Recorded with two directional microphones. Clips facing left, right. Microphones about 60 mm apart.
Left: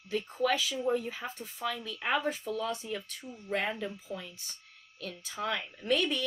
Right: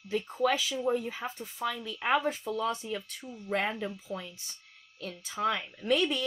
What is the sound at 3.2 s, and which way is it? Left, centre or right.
Speech, centre.